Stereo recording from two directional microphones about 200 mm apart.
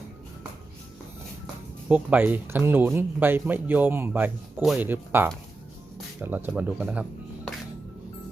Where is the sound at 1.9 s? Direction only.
10° right (ahead or behind).